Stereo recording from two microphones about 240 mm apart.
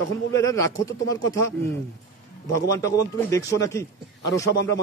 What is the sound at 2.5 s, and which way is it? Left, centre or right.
A man's voice, centre.